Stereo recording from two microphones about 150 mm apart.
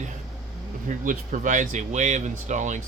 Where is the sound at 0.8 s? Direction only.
60° right (ahead or behind).